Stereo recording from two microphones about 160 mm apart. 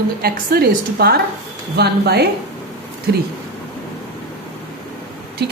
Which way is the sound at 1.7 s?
90° right.